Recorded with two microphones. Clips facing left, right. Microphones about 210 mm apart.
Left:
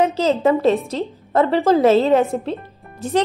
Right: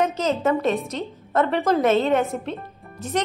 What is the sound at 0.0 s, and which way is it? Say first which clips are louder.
A woman's voice: left 5 dB; 30° left (ahead or behind).